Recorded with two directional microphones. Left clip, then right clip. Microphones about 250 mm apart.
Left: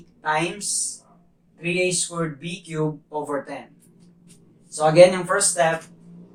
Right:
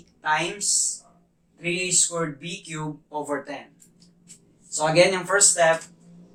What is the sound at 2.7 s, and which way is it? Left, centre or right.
Speech, right.